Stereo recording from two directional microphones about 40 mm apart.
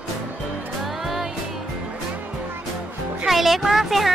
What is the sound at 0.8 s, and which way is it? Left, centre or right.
Music, centre.